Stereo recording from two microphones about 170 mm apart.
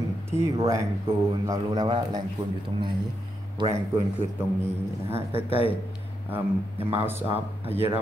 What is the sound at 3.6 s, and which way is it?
Speech, 25° right (ahead or behind).